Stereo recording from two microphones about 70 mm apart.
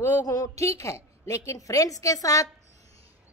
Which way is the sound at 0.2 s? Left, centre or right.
Left.